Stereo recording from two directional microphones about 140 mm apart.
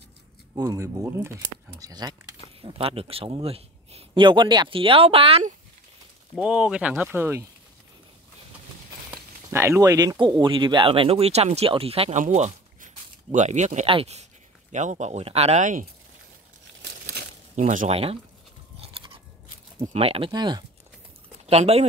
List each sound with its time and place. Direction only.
0.6 s speech: 25° right (ahead or behind)
2.6 s speech: 40° right (ahead or behind)
6.3 s speech: 5° right (ahead or behind)
9.1 s speech: 20° right (ahead or behind); by 12.2 s 45° right (ahead or behind)
12.2 s speech: 60° right (ahead or behind)
13.8 s speech: 45° right (ahead or behind)
14.7 s speech: 60° right (ahead or behind)
17.6 s speech: 55° right (ahead or behind)
19.8 s speech: 45° right (ahead or behind)
21.5 s speech: 50° right (ahead or behind)